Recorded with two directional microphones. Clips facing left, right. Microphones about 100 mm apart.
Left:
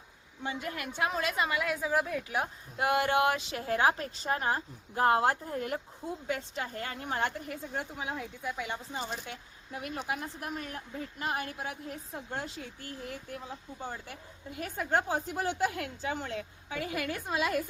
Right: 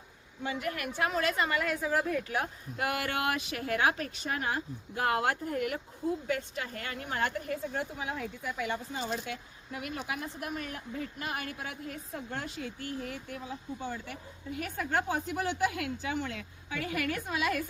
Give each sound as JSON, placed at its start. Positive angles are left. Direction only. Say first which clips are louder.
{"t": 0.4, "sound": "a woman's voice", "louder": "right 2 dB", "side_deg": 25}
{"t": 2.4, "sound": "speech", "louder": "left 2 dB", "side_deg": 25}
{"t": 14.6, "sound": "speech", "louder": "left 2 dB", "side_deg": 25}